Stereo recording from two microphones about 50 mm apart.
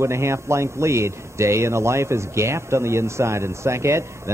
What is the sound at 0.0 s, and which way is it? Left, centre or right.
Speech, right.